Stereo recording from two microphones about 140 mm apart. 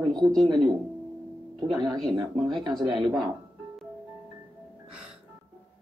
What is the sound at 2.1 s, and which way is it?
Speech, 30° right (ahead or behind).